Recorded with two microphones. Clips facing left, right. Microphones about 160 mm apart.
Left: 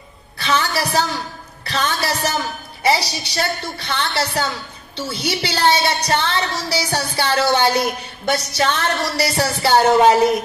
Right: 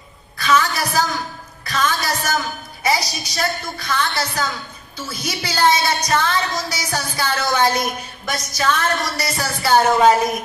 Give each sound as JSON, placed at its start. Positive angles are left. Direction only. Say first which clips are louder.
{"t": 0.4, "sound": "a woman's voice", "louder": "right 2 dB", "side_deg": 30}